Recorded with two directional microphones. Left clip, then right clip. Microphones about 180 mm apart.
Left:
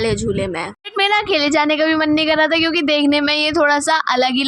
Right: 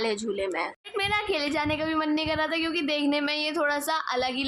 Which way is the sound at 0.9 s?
50° left (ahead or behind).